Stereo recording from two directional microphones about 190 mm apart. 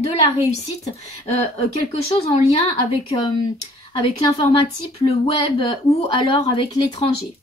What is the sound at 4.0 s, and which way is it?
A woman's voice, 30° left (ahead or behind).